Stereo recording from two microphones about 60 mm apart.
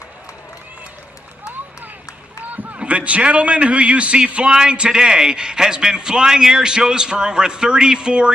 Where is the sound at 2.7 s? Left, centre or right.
Right.